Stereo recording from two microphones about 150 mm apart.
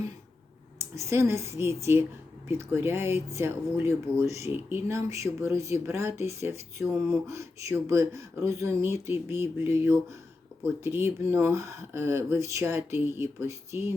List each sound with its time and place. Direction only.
0.8 s speech: 20° right (ahead or behind)